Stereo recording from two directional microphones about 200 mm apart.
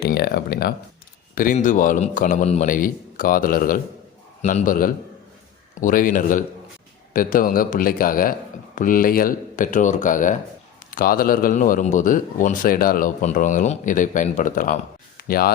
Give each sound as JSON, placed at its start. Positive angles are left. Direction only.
{"t": 0.0, "sound": "a man's voice", "side_deg": 50}